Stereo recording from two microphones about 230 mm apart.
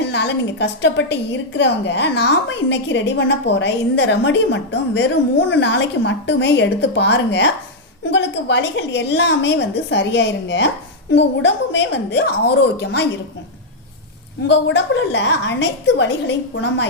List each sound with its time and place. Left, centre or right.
0.0 s a woman's voice: left
14.4 s a woman's voice: left